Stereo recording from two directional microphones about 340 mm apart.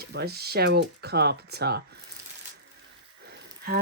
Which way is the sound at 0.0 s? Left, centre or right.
Right.